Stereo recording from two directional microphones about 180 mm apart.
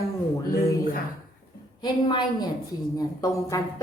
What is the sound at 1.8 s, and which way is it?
A woman's voice, 25° left (ahead or behind).